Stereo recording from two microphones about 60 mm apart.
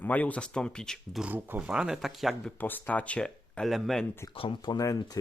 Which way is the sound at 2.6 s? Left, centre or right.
Left.